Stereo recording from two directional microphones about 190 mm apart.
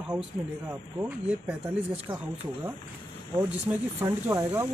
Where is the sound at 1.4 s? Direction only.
5° right (ahead or behind).